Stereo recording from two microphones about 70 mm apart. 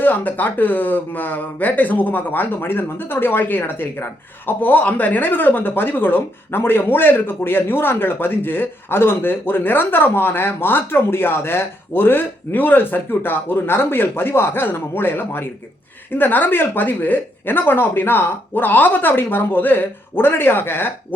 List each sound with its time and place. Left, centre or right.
0.0 s speech: left